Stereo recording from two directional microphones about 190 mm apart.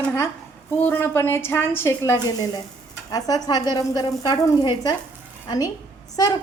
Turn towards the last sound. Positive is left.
turn(degrees=20)  # may be behind; listen again after turning